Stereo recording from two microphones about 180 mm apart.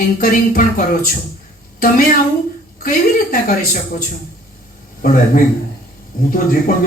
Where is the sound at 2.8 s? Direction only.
50° left (ahead or behind).